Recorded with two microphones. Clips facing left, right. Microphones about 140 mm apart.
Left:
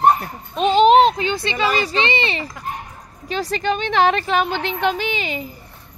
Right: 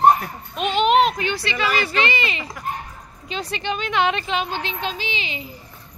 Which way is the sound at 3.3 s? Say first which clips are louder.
Left 5 dB; 40° left (ahead or behind).